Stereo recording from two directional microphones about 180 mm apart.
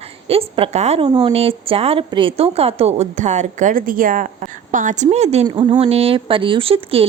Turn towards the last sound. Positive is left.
turn(degrees=-30)  # may be behind; listen again after turning